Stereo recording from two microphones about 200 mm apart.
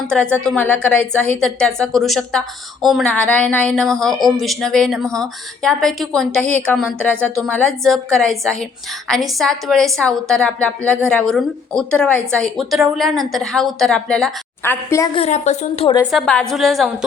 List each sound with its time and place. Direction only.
0.1 s a woman's voice: 5° left (ahead or behind)
15.1 s speech: 30° left (ahead or behind)
16.0 s a woman's voice: centre (ahead or behind)